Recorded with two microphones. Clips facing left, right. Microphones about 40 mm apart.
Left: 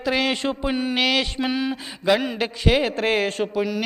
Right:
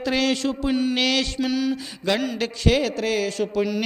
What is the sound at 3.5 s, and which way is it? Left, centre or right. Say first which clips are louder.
Speech: right 1 dB; centre.